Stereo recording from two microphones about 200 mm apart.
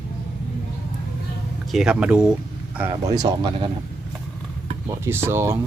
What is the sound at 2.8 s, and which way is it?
Speech, 20° right (ahead or behind).